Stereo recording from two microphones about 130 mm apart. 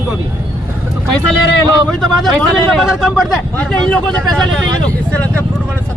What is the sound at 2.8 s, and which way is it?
Speech, 5° right (ahead or behind).